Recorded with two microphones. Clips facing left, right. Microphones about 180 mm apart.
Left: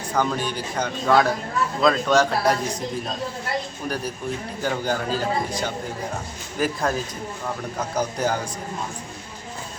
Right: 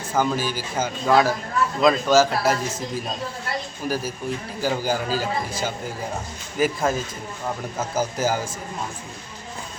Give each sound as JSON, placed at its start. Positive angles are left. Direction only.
{"t": 0.1, "sound": "speech", "side_deg": -5}
{"t": 3.8, "sound": "speech", "side_deg": -5}